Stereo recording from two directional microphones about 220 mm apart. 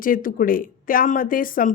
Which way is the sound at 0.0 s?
40° left (ahead or behind).